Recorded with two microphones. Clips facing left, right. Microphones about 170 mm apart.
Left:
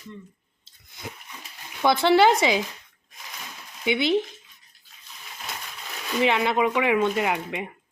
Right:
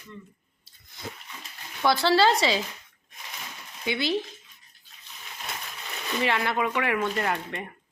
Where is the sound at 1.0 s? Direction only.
15° left (ahead or behind).